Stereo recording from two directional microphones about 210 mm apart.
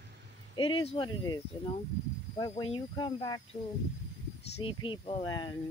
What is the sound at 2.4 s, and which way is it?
Speech, 20° left (ahead or behind).